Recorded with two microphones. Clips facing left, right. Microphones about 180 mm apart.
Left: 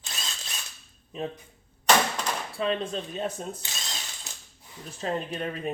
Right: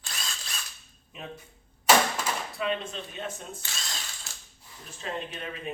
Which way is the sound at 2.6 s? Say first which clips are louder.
Left 6 dB; 35° left (ahead or behind).